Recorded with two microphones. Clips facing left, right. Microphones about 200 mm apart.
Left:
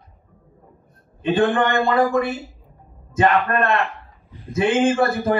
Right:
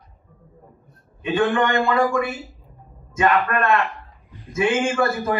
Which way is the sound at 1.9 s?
30° left (ahead or behind).